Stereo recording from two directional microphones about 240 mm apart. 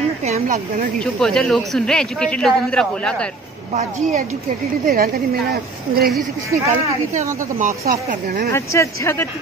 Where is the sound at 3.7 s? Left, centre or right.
Right.